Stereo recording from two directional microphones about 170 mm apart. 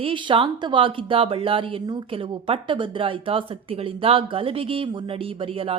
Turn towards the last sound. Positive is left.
turn(degrees=-35)  # may be behind; listen again after turning